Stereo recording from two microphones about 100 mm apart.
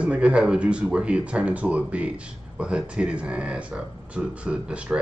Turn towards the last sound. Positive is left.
turn(degrees=-10)  # may be behind; listen again after turning